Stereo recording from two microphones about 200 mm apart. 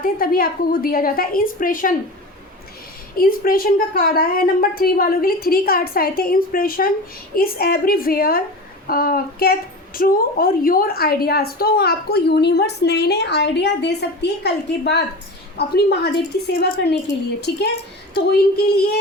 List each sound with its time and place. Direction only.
0.0 s a woman's voice: 45° left (ahead or behind)
3.2 s a woman's voice: 45° left (ahead or behind)